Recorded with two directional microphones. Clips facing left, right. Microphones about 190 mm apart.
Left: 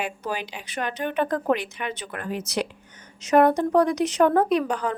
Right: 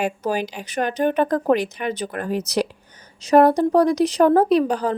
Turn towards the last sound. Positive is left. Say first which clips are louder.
# right 5 dB
turn(degrees=-35)  # may be behind; listen again after turning